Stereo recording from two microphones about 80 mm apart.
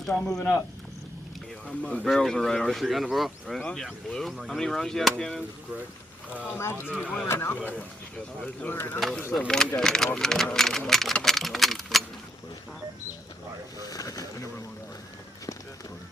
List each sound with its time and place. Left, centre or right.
0.0 s speech: centre
1.6 s speech: centre
6.6 s speech: left
7.0 s speech: centre
7.3 s speech: left
9.5 s speech: centre
10.2 s a sound: centre
13.7 s a sound: left